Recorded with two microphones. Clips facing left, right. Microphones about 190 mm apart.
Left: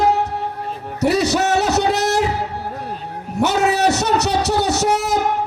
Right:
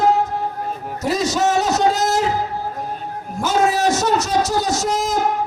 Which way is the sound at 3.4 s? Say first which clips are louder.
Left 1 dB; 70° left (ahead or behind).